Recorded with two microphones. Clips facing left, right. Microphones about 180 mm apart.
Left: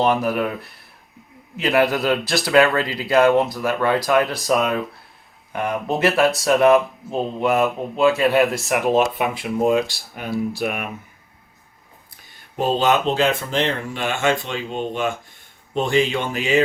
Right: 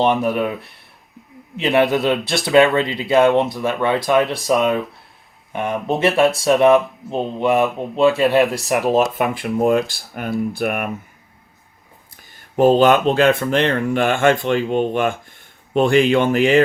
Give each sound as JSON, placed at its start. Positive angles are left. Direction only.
{"t": 0.0, "sound": "speech", "side_deg": 0}
{"t": 10.5, "sound": "speech", "side_deg": -55}
{"t": 12.1, "sound": "speech", "side_deg": -50}